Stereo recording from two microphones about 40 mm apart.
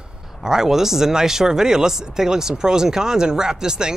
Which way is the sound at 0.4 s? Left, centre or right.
Centre.